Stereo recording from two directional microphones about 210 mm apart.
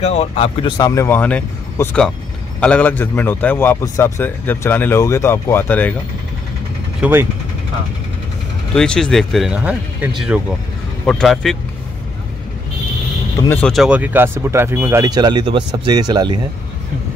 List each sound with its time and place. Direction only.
0.0 s a man's voice: 30° left (ahead or behind); by 5.9 s 10° left (ahead or behind)
7.0 s speech: 10° right (ahead or behind)
8.7 s speech: 5° left (ahead or behind)
13.4 s speech: 10° left (ahead or behind); by 16.3 s 20° right (ahead or behind)